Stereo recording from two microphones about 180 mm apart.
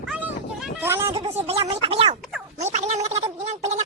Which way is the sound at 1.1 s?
30° right (ahead or behind).